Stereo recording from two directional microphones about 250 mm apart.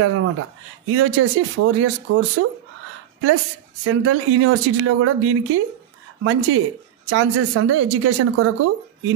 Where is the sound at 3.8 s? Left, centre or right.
Right.